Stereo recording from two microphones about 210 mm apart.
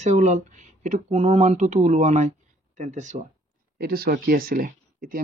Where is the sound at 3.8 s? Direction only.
45° right (ahead or behind).